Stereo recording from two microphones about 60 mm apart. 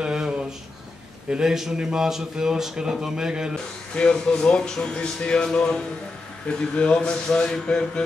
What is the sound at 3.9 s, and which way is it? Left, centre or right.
Speech, centre.